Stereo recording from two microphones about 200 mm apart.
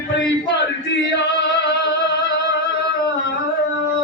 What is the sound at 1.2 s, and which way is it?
Music, 60° left (ahead or behind).